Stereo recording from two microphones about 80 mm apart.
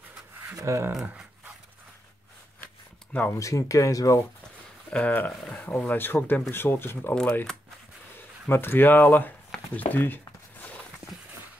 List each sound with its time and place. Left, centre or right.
0.6 s speech: right
2.6 s zipper: left
3.3 s speech: left
4.9 s speech: centre
8.5 s speech: left